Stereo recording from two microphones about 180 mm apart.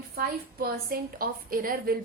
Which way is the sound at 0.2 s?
55° right (ahead or behind).